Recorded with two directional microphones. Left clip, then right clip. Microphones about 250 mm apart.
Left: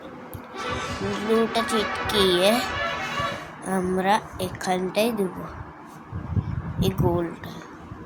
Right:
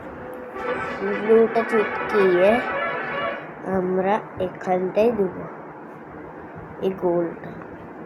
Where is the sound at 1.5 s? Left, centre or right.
Left.